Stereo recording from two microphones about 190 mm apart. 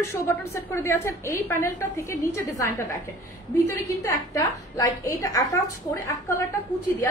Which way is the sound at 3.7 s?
15° left (ahead or behind).